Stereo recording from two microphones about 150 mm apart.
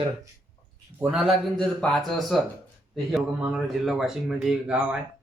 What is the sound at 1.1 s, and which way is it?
Speech, centre (ahead or behind).